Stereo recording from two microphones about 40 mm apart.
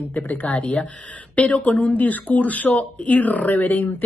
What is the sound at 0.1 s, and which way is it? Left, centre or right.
A woman's voice, left.